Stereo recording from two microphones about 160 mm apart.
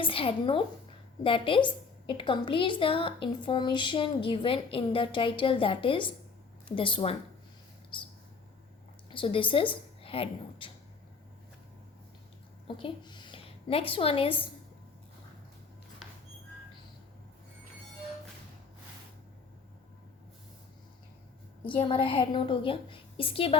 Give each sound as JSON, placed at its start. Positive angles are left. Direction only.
{"t": 0.0, "sound": "a woman's voice", "side_deg": 35}
{"t": 7.9, "sound": "a sound", "side_deg": 30}
{"t": 9.0, "sound": "a woman's voice", "side_deg": 30}
{"t": 12.6, "sound": "a woman's voice", "side_deg": 30}
{"t": 21.8, "sound": "a woman's voice", "side_deg": 35}